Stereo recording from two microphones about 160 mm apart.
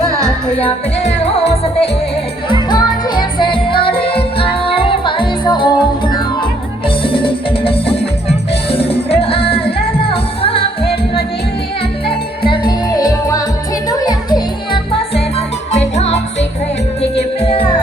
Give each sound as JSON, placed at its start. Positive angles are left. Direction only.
{"t": 0.3, "sound": "music", "side_deg": 5}
{"t": 0.6, "sound": "music", "side_deg": 40}
{"t": 2.5, "sound": "music", "side_deg": 25}